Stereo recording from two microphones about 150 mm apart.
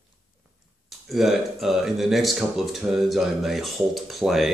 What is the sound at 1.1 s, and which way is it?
Speech, centre (ahead or behind).